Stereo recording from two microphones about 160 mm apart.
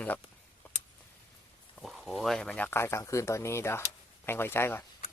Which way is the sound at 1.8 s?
Centre (ahead or behind).